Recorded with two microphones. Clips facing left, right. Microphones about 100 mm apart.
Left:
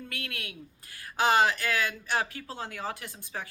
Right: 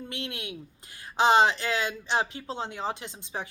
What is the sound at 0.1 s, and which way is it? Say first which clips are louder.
Speech: right 3 dB; 20° right (ahead or behind).